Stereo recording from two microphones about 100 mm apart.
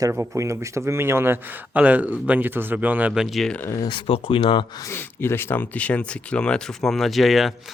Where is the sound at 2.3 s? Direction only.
20° right (ahead or behind).